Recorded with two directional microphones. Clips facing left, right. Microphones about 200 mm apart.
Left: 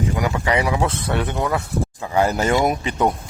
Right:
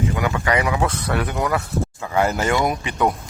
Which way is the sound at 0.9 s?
25° left (ahead or behind).